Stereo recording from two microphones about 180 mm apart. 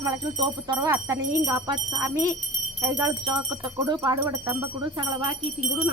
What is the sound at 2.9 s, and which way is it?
Speech, 20° right (ahead or behind).